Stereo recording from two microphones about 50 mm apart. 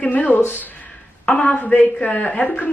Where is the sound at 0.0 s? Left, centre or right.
Left.